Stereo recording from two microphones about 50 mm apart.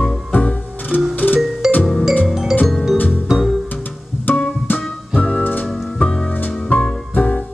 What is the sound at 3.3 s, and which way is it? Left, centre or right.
Music, centre.